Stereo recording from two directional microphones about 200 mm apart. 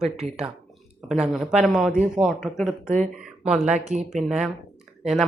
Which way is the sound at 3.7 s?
35° right (ahead or behind).